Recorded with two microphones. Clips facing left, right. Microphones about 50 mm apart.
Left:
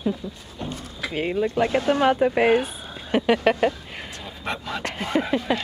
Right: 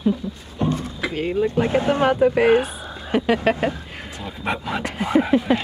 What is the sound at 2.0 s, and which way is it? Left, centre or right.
Speech, centre.